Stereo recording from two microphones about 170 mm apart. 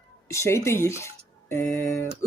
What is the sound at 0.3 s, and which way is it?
Speech, 15° left (ahead or behind).